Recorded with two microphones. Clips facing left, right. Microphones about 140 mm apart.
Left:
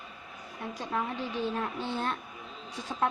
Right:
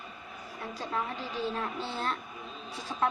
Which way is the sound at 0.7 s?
15° left (ahead or behind).